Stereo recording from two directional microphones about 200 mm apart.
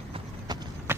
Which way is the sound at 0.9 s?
10° right (ahead or behind).